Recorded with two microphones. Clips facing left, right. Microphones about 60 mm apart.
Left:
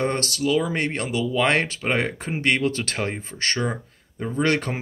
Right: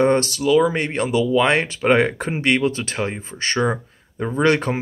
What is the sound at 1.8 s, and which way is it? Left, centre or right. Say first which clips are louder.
Speech: right 7 dB; right.